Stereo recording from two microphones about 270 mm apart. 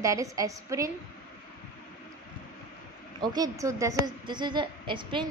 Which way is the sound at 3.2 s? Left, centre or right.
Centre.